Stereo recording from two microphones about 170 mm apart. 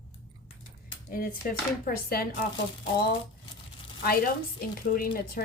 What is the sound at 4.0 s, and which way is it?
A woman's voice, 60° left (ahead or behind).